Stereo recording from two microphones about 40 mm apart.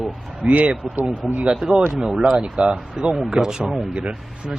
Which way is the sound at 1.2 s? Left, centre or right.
Centre.